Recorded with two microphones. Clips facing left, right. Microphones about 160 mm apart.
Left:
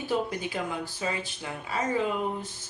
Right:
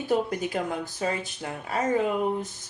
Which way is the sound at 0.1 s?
50° right (ahead or behind).